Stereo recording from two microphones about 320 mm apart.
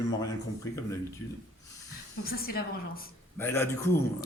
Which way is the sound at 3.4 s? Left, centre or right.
Centre.